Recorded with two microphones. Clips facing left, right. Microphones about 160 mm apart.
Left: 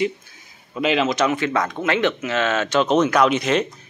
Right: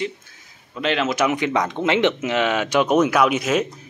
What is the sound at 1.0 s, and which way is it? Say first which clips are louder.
Speech: even; 10° right (ahead or behind).